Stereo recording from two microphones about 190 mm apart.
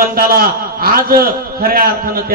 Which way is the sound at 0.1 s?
50° right (ahead or behind).